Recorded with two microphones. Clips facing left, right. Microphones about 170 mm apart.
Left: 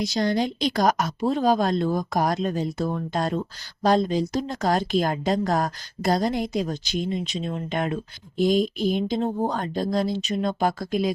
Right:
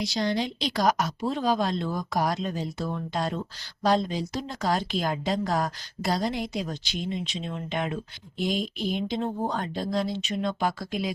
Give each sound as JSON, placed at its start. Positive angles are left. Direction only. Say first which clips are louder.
{"t": 0.0, "sound": "speech", "louder": "left 4 dB", "side_deg": 45}